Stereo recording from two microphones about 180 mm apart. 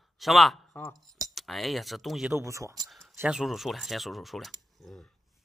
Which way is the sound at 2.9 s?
Centre (ahead or behind).